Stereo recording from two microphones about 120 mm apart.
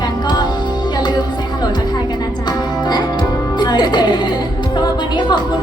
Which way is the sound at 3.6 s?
40° left (ahead or behind).